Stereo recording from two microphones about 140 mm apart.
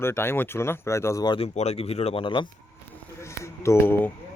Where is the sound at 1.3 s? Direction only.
50° left (ahead or behind).